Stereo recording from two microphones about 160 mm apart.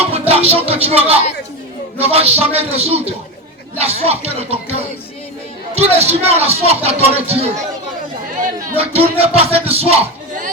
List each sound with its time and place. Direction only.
0.1 s music: 40° right (ahead or behind)
2.0 s speech: 40° right (ahead or behind)
8.8 s speech: 40° right (ahead or behind)